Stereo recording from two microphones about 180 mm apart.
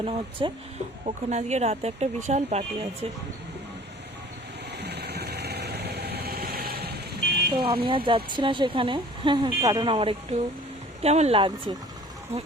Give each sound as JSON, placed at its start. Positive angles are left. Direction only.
{"t": 0.0, "sound": "a woman's voice", "side_deg": -30}
{"t": 1.0, "sound": "speech", "side_deg": -40}
{"t": 4.8, "sound": "vehicle", "side_deg": -65}
{"t": 7.5, "sound": "a woman's voice", "side_deg": -30}